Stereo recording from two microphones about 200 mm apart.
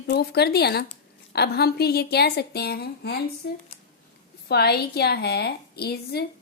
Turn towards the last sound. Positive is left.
turn(degrees=55)  # may be behind; listen again after turning